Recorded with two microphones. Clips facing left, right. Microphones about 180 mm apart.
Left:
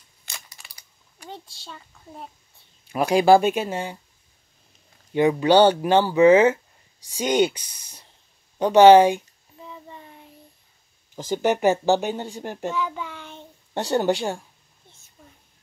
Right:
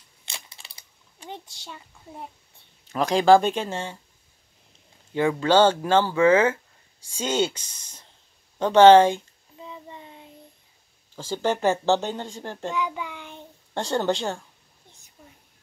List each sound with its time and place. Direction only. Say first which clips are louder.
0.2 s a sound: right 1 dB; 25° right (ahead or behind)
2.9 s speech: left 1 dB; 10° left (ahead or behind)
5.1 s speech: left 3 dB; 15° left (ahead or behind)
9.6 s a sound: right 1 dB; 15° right (ahead or behind)
11.1 s speech: left 3 dB; 15° left (ahead or behind)
12.7 s child singing: even; 15° right (ahead or behind)
13.7 s speech: left 3 dB; 15° left (ahead or behind)
15.2 s whispering: right 1 dB; 5° right (ahead or behind)